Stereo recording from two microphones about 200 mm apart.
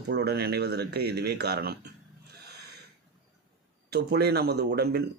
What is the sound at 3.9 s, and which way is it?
Speech, 55° right (ahead or behind).